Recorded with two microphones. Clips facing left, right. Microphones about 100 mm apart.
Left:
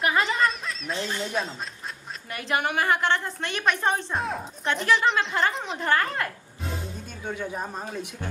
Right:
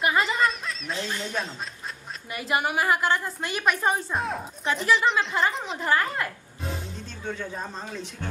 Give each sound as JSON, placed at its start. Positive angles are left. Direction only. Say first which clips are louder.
{"t": 0.0, "sound": "a woman's voice", "louder": "even", "side_deg": 0}
{"t": 7.2, "sound": "a man's voice", "louder": "left 2 dB", "side_deg": 10}